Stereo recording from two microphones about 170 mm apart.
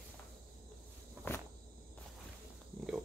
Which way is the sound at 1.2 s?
10° right (ahead or behind).